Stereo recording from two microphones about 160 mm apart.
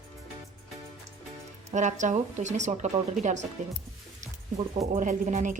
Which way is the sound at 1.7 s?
50° right (ahead or behind).